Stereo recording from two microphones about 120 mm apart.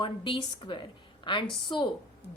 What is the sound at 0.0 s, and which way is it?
A woman's voice, 40° left (ahead or behind).